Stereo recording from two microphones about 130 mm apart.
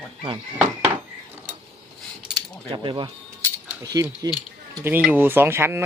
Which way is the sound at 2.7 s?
40° right (ahead or behind).